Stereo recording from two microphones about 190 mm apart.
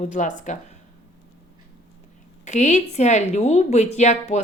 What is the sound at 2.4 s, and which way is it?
A woman's voice, 40° left (ahead or behind).